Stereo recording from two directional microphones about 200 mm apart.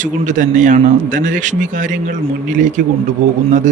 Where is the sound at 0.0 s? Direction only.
40° right (ahead or behind).